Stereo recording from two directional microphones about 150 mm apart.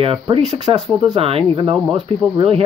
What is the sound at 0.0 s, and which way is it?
Speech, 40° right (ahead or behind).